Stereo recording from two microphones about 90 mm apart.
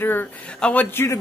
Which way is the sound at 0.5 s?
10° left (ahead or behind).